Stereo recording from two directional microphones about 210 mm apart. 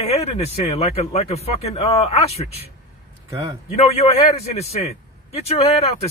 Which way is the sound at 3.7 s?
30° left (ahead or behind).